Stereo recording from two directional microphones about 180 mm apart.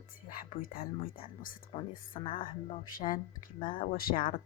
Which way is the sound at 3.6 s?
50° left (ahead or behind).